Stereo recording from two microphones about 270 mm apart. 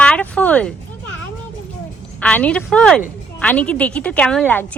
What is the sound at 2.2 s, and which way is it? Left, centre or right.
A woman's voice, centre.